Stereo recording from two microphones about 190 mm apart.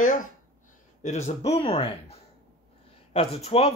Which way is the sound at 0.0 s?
45° left (ahead or behind).